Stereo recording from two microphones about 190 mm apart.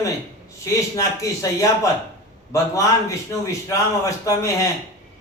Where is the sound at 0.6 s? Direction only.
15° left (ahead or behind).